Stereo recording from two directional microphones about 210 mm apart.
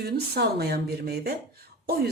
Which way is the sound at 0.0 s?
50° right (ahead or behind).